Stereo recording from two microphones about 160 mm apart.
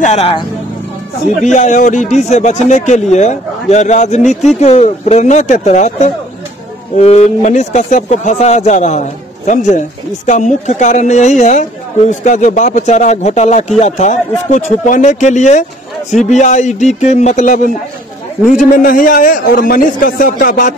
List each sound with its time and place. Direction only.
0.0 s speech: 40° left (ahead or behind)
1.4 s a man's voice: 50° left (ahead or behind)